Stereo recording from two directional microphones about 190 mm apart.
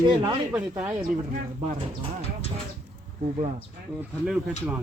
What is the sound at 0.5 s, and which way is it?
Speech, 5° right (ahead or behind).